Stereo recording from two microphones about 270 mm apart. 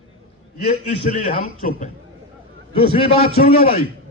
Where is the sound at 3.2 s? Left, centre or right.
Left.